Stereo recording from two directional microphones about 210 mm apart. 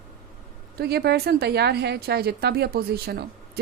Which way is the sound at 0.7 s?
50° right (ahead or behind).